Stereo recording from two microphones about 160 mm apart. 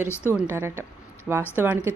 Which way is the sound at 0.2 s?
10° right (ahead or behind).